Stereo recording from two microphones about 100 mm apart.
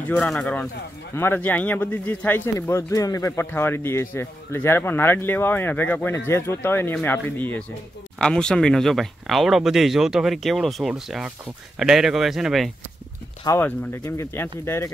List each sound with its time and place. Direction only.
0.2 s speech: 10° left (ahead or behind)
1.1 s speech: 25° left (ahead or behind)
8.2 s speech: 10° left (ahead or behind)
13.5 s speech: 40° left (ahead or behind)
14.0 s speech: 25° left (ahead or behind)